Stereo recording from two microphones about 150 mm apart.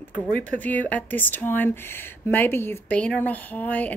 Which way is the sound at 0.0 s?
10° left (ahead or behind).